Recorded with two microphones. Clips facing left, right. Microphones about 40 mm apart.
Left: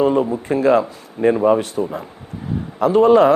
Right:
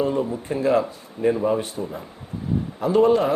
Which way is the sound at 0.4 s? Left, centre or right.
Left.